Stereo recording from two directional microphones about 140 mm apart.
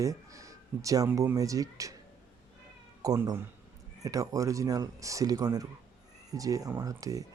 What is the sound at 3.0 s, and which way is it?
Speech, 25° right (ahead or behind).